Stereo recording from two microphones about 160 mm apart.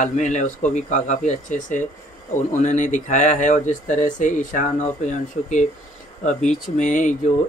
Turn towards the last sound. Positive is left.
turn(degrees=50)  # may be behind; listen again after turning